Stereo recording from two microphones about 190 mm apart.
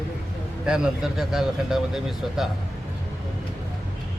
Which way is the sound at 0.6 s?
5° right (ahead or behind).